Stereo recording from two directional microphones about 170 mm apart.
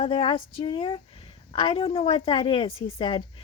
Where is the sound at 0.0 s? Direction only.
30° left (ahead or behind).